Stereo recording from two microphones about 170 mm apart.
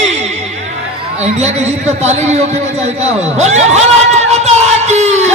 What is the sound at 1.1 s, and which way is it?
A man's voice, 40° right (ahead or behind).